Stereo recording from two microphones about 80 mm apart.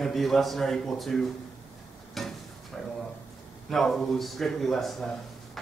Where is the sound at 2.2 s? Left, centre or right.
Centre.